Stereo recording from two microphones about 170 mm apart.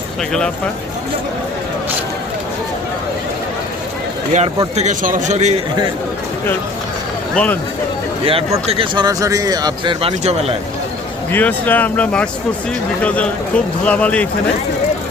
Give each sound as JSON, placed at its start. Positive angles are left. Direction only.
{"t": 4.7, "sound": "a man's voice", "side_deg": -45}
{"t": 7.3, "sound": "speech", "side_deg": 10}
{"t": 8.2, "sound": "a man's voice", "side_deg": -35}
{"t": 11.3, "sound": "speech", "side_deg": 10}